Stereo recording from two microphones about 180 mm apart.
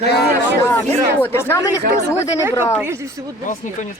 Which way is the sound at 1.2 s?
10° left (ahead or behind).